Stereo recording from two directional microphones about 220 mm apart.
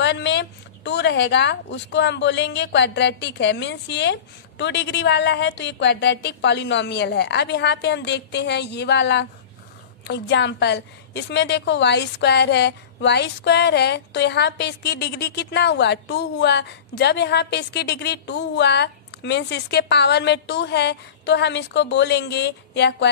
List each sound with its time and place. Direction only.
0.0 s a woman's voice: 50° left (ahead or behind)